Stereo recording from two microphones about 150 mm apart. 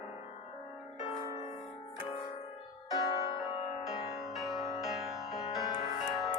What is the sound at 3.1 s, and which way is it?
Music, 30° left (ahead or behind).